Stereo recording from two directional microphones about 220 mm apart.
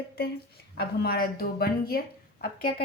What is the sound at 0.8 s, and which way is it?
A woman's voice, 45° left (ahead or behind).